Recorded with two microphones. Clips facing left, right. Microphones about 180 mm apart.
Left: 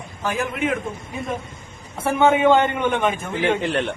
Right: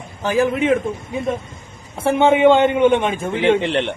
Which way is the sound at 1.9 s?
25° right (ahead or behind).